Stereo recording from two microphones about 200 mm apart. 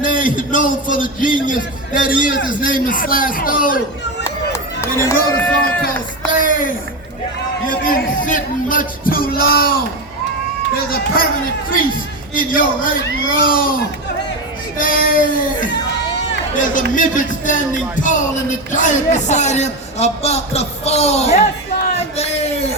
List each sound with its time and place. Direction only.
0.0 s a man's voice: 40° left (ahead or behind)
4.5 s speech: 15° left (ahead or behind)
7.9 s speech: 40° left (ahead or behind)
10.8 s speech: 45° left (ahead or behind)
12.3 s speech: 45° left (ahead or behind)
14.8 s a man's voice: 45° left (ahead or behind)